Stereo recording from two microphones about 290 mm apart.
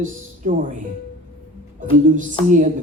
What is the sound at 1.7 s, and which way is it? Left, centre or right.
Speech, right.